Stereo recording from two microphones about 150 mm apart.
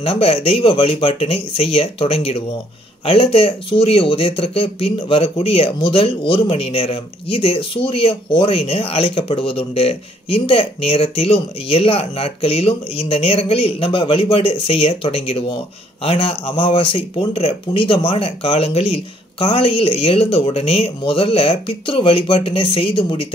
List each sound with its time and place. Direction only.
0.0 s speech: 40° left (ahead or behind)